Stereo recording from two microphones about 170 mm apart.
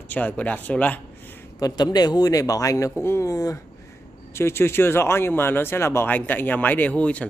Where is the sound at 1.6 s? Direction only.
25° left (ahead or behind).